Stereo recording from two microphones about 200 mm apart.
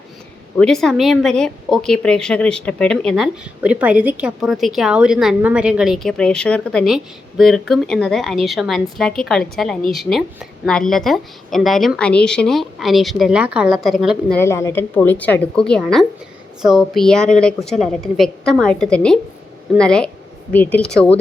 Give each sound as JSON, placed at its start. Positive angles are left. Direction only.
{"t": 0.6, "sound": "a woman's voice", "side_deg": 5}
{"t": 14.3, "sound": "a woman's voice", "side_deg": 15}